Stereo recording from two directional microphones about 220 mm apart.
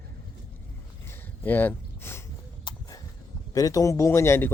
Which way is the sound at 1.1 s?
10° left (ahead or behind).